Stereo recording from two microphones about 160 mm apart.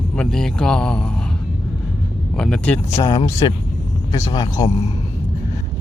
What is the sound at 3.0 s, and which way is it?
Speech, 25° left (ahead or behind).